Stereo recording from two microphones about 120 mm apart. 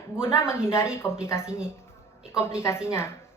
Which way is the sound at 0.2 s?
20° left (ahead or behind).